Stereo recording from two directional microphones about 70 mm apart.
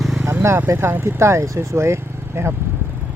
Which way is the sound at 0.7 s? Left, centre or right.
Right.